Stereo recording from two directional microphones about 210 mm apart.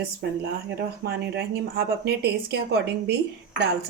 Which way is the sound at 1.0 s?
50° right (ahead or behind).